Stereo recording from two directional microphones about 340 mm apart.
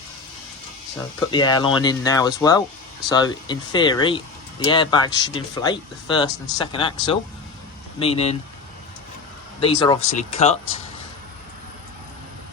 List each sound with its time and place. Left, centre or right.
1.3 s speech: centre
9.6 s speech: centre